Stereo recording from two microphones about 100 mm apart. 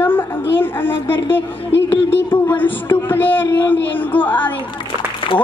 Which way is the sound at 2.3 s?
20° left (ahead or behind).